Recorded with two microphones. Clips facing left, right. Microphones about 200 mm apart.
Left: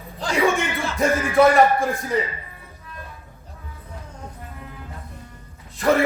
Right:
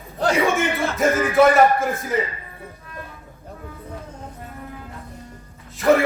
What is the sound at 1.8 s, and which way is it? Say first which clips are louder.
Speech: even; centre (ahead or behind).